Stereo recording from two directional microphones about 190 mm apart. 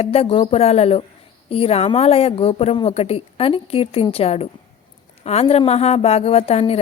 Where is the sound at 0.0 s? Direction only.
30° left (ahead or behind).